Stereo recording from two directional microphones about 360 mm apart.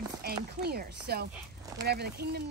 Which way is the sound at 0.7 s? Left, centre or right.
Right.